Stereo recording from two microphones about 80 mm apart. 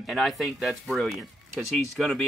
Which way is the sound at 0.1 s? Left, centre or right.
Centre.